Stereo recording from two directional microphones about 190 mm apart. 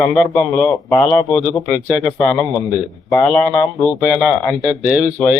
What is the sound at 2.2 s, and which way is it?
Speech, 15° left (ahead or behind).